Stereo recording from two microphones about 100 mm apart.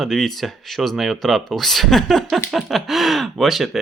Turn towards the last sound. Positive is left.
turn(degrees=0)  # may be behind; listen again after turning